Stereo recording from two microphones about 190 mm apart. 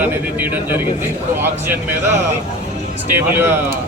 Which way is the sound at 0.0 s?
10° right (ahead or behind).